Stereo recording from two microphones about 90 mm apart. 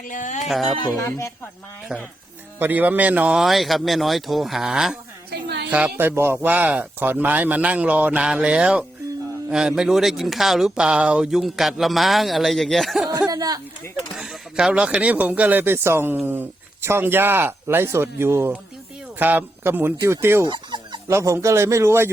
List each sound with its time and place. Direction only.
0.4 s speech: centre (ahead or behind)
0.9 s speech: 30° left (ahead or behind)
1.9 s speech: 15° right (ahead or behind)
3.3 s speech: centre (ahead or behind)
5.7 s speech: 20° right (ahead or behind); by 13.0 s centre (ahead or behind)
13.1 s a sound: 45° right (ahead or behind)
14.2 s speech: 5° right (ahead or behind); by 20.5 s 30° right (ahead or behind)
20.5 s fowl: 60° right (ahead or behind)
21.1 s a man's voice: 30° right (ahead or behind)